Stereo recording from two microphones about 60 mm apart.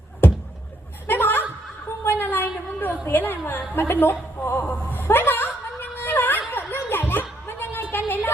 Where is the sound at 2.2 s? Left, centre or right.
Left.